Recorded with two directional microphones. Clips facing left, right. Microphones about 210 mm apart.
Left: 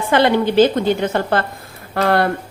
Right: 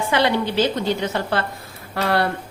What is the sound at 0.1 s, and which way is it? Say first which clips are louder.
A woman's voice: left 6 dB; 50° left (ahead or behind).